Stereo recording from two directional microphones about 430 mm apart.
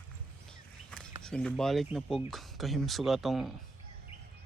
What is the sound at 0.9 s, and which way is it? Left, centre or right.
Speech, centre.